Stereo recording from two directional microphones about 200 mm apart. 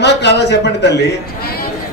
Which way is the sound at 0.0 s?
60° left (ahead or behind).